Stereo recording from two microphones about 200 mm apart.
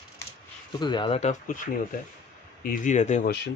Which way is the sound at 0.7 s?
20° left (ahead or behind).